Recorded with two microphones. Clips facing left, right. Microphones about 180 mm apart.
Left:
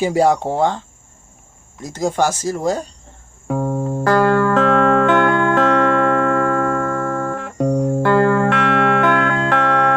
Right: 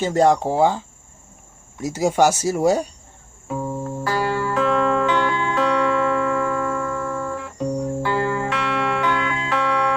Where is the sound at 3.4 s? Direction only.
65° left (ahead or behind).